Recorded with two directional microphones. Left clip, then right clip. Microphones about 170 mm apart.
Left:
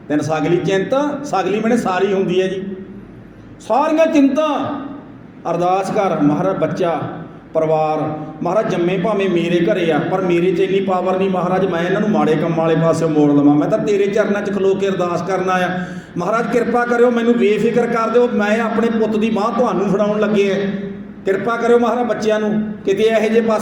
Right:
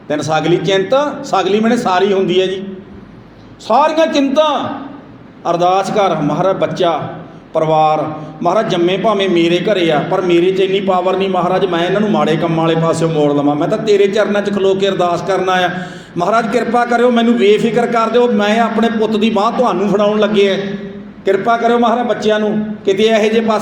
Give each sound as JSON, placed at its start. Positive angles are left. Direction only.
{"t": 0.1, "sound": "a man's voice", "side_deg": -30}
{"t": 3.7, "sound": "a man's voice", "side_deg": -25}